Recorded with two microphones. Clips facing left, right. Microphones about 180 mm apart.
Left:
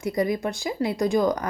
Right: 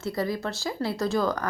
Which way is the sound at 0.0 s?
20° left (ahead or behind).